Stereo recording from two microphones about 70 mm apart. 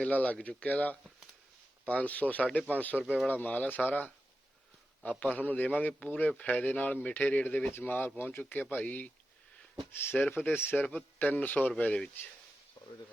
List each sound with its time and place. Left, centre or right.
0.0 s a man's voice: left
2.9 s speech: centre
3.2 s a man's voice: left
10.3 s a man's voice: left